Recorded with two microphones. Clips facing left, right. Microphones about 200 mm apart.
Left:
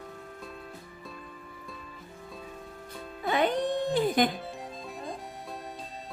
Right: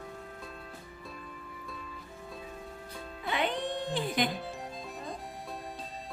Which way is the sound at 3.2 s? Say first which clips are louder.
Left 6 dB; 45° left (ahead or behind).